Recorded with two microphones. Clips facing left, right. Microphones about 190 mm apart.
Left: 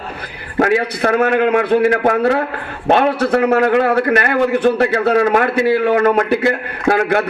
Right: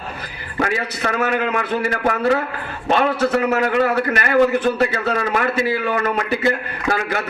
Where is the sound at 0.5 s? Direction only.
55° left (ahead or behind).